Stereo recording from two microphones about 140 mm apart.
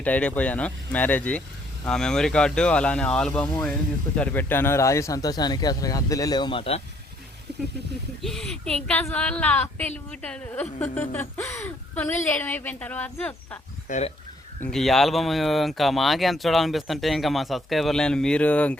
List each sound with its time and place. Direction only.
0.0 s a woman's voice: 10° left (ahead or behind); by 6.8 s 40° left (ahead or behind)
8.2 s a woman's voice: 5° left (ahead or behind)
13.9 s speech: 70° left (ahead or behind)
14.6 s speech: 5° left (ahead or behind)